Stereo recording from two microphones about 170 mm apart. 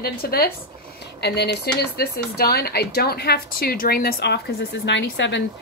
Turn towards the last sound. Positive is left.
turn(degrees=90)